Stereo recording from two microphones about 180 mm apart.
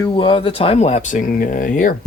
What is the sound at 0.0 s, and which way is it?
Speech, 30° left (ahead or behind).